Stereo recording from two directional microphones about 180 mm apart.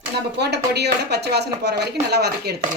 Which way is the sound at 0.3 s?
65° right (ahead or behind).